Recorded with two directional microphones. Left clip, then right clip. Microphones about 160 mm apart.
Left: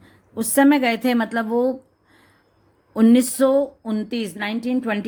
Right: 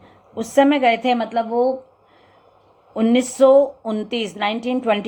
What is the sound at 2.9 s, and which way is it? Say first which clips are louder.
A woman's voice: left 1 dB; 60° left (ahead or behind).